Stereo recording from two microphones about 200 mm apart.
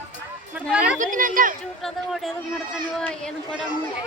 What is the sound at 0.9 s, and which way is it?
Speech, 40° right (ahead or behind).